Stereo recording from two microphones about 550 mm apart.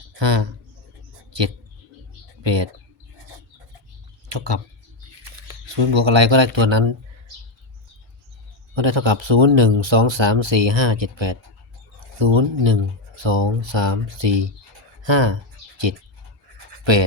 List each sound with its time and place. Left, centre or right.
0.2 s speech: right
2.4 s speech: right
4.3 s speech: right
5.6 s speech: right
8.7 s speech: right